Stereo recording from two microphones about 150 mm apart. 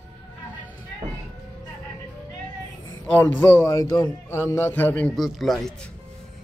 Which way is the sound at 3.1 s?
15° left (ahead or behind).